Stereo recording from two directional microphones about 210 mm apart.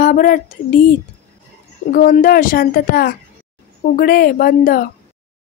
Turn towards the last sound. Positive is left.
turn(degrees=45)  # may be behind; listen again after turning